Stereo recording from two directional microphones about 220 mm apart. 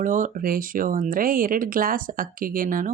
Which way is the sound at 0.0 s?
35° right (ahead or behind).